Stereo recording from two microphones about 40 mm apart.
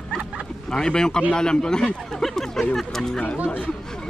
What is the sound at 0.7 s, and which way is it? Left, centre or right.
A man's voice, centre.